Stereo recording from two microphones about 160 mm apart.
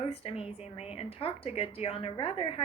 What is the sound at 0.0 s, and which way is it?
A woman's voice, 35° left (ahead or behind).